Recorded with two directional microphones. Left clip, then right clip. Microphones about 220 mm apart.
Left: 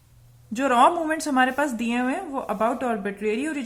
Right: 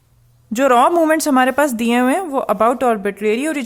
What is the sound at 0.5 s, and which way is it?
Speech, 45° right (ahead or behind).